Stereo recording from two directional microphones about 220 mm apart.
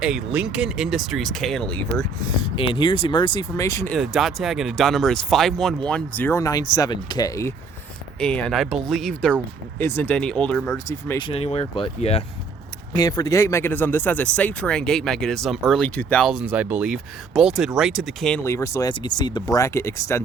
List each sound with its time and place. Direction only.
0.0 s speech: 5° right (ahead or behind)
2.6 s speech: 20° left (ahead or behind)
3.9 s speech: centre (ahead or behind)
11.3 s speech: 25° left (ahead or behind)
12.9 s speech: 15° left (ahead or behind); by 18.3 s centre (ahead or behind)
18.4 s speech: 15° left (ahead or behind)